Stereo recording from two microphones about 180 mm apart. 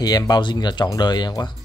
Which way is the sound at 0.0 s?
20° left (ahead or behind).